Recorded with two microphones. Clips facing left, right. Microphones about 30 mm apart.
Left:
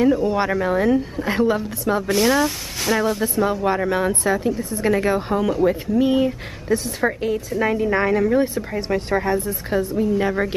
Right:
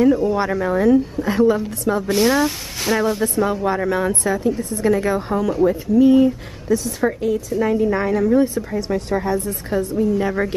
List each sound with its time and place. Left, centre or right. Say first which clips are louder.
0.3 s a woman's voice: right 1 dB; centre
2.0 s a woman's voice: right 1 dB; centre
4.8 s a woman's voice: right 1 dB; centre
5.7 s a woman's voice: right 4 dB; left
8.7 s a woman's voice: left 1 dB; left
9.1 s a woman's voice: left 1 dB; centre